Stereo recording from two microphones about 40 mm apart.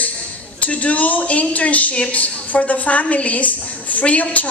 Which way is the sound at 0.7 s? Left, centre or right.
Left.